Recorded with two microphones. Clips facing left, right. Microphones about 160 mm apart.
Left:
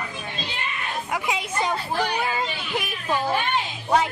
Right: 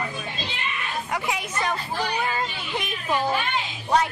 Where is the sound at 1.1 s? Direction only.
15° left (ahead or behind).